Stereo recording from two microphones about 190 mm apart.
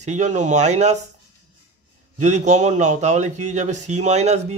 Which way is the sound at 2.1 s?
40° right (ahead or behind).